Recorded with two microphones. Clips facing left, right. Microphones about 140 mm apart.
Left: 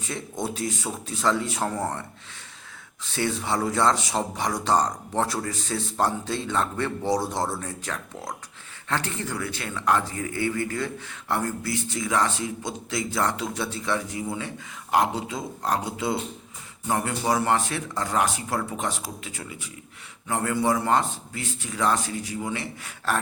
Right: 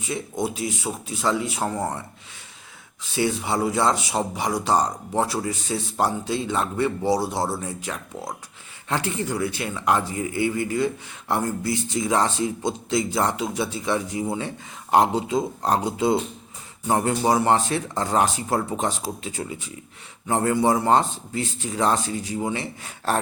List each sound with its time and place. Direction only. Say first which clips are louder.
0.0 s speech: right 4 dB; 5° right (ahead or behind)
14.2 s speech: right 4 dB; 30° right (ahead or behind)